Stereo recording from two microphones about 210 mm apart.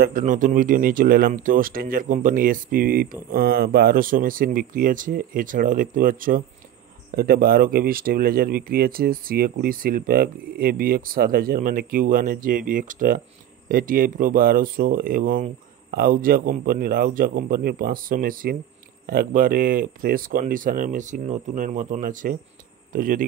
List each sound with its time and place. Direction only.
0.0 s speech: 40° right (ahead or behind)